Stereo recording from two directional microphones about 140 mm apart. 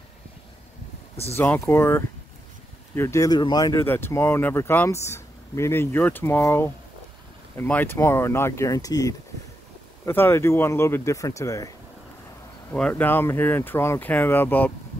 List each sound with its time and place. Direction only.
1.3 s speech: 15° left (ahead or behind)
3.8 s speech: 15° left (ahead or behind)
12.7 s speech: 10° left (ahead or behind)